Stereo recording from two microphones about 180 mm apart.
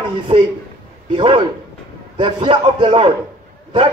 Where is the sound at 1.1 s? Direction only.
30° right (ahead or behind).